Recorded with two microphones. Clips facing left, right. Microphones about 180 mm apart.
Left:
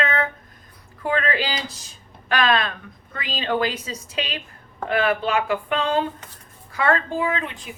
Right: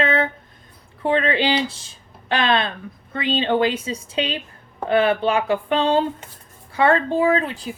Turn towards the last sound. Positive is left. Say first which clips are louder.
# right 6 dB
turn(degrees=-35)  # may be behind; listen again after turning